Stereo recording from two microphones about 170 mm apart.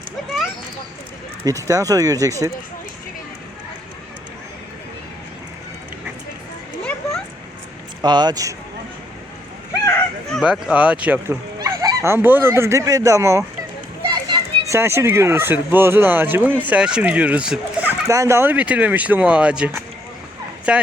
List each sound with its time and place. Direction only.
1.5 s speech: 20° right (ahead or behind)
8.0 s speech: 25° right (ahead or behind)
10.2 s speech: centre (ahead or behind)
11.6 s speech: 20° right (ahead or behind)
14.1 s children playing: 25° right (ahead or behind)
14.8 s speech: 15° right (ahead or behind)